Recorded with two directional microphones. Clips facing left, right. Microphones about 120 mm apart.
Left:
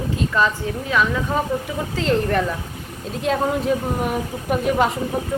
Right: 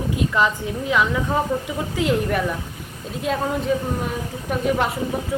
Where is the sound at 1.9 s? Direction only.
10° right (ahead or behind).